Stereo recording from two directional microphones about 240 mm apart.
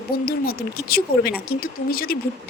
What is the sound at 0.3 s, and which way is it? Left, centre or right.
A woman's voice, left.